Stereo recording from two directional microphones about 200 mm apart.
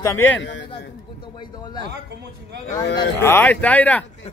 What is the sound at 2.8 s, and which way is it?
Speech, 60° left (ahead or behind).